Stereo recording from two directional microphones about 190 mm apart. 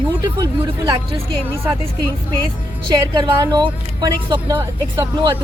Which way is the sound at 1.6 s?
15° right (ahead or behind).